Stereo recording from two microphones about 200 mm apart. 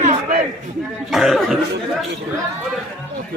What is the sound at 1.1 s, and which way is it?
Speech, centre (ahead or behind).